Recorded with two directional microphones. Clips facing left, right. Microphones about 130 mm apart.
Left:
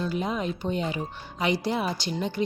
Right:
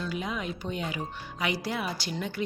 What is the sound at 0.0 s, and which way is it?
A woman's voice, 35° left (ahead or behind).